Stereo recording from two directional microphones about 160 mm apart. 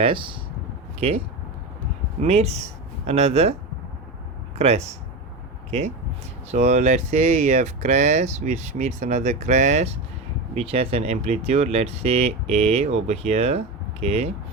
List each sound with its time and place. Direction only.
0.0 s speech: 30° right (ahead or behind)
2.2 s speech: 40° right (ahead or behind)
4.5 s speech: 40° right (ahead or behind)
6.5 s speech: 45° right (ahead or behind)